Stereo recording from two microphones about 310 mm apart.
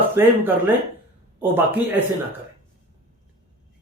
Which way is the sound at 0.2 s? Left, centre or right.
Centre.